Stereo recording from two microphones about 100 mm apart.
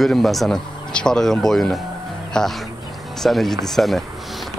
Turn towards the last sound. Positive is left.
turn(degrees=0)  # may be behind; listen again after turning